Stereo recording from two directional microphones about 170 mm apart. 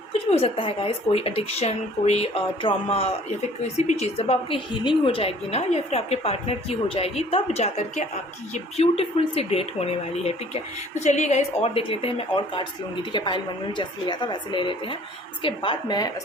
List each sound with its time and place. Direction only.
0.1 s a woman's voice: 35° left (ahead or behind)